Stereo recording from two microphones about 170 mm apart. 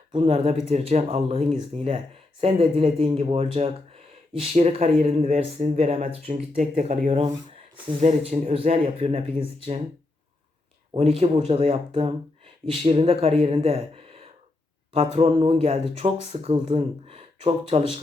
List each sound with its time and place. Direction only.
0.1 s speech: 35° right (ahead or behind)
10.9 s speech: 35° right (ahead or behind)